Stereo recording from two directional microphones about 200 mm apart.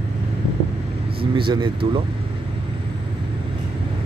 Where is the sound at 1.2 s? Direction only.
25° right (ahead or behind).